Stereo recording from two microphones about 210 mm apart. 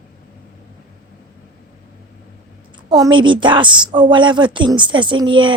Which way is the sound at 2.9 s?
20° right (ahead or behind).